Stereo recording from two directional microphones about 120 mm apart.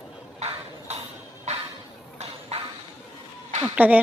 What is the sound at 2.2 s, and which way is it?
Vehicle, 60° right (ahead or behind).